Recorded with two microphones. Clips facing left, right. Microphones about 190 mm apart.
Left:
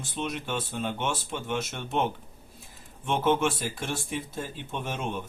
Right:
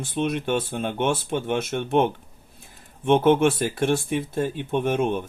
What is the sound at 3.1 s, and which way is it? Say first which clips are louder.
Speech: right 8 dB; 60° right (ahead or behind).